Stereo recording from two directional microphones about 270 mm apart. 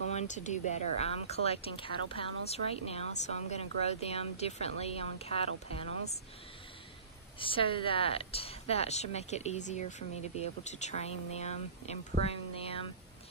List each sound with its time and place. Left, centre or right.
0.1 s speech: left
7.3 s speech: centre